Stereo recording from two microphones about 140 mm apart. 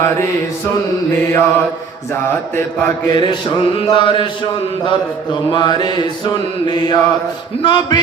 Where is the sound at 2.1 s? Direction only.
15° left (ahead or behind).